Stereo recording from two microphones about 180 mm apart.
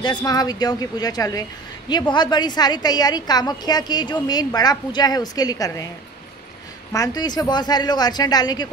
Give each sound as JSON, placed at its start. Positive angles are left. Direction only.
{"t": 0.0, "sound": "a woman's voice", "side_deg": 25}
{"t": 6.9, "sound": "a woman's voice", "side_deg": 20}